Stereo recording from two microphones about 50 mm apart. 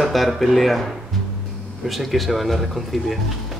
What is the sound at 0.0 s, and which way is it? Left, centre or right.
Speech, centre.